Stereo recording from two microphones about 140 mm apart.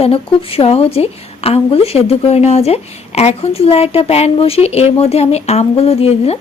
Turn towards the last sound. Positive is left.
turn(degrees=45)  # may be behind; listen again after turning